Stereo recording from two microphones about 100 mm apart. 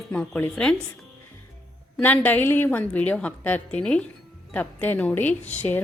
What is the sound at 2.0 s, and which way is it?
A woman's voice, 15° left (ahead or behind).